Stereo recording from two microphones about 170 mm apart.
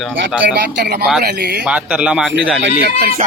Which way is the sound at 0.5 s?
80° right.